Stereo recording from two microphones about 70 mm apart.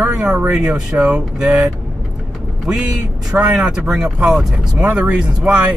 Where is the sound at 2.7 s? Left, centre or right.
Centre.